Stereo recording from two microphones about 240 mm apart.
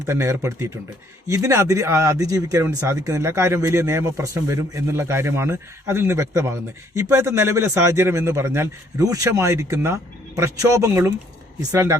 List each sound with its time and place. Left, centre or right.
0.0 s speech: centre